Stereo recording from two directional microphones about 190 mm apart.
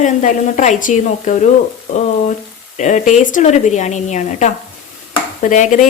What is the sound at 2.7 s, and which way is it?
Speech, 40° left (ahead or behind).